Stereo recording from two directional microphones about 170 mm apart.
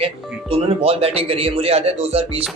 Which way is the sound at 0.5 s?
35° right (ahead or behind).